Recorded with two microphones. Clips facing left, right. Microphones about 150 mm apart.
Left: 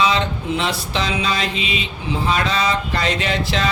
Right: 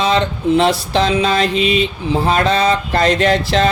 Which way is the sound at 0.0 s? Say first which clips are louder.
Right 4 dB; 50° right (ahead or behind).